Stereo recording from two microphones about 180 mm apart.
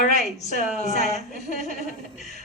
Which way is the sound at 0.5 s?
40° left (ahead or behind).